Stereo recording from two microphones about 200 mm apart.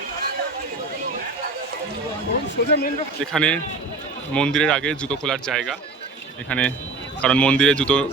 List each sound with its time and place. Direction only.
2.6 s speech: 55° left (ahead or behind)
3.2 s a man's voice: 5° left (ahead or behind)